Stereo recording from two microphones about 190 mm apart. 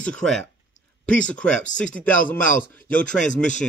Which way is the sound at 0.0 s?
5° left (ahead or behind).